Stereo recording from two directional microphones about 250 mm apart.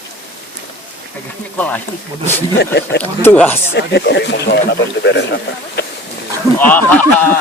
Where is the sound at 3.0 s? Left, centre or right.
Centre.